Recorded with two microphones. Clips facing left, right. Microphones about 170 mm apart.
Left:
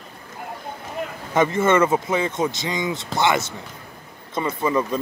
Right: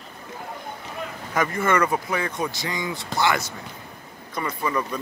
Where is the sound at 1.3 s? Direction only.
25° left (ahead or behind).